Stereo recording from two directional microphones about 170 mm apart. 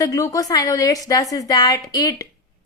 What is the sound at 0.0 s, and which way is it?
Speech, 20° left (ahead or behind).